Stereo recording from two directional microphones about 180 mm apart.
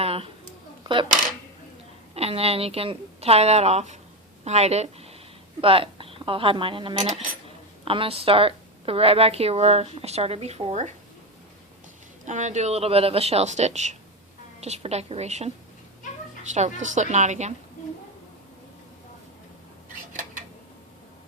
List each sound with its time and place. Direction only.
0.0 s a sound: 30° right (ahead or behind)
2.1 s a woman's voice: 35° right (ahead or behind)
12.2 s a woman's voice: 40° right (ahead or behind)
16.8 s a woman's voice: 40° right (ahead or behind)